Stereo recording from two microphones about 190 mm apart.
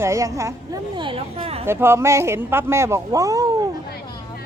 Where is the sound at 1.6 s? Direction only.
15° right (ahead or behind).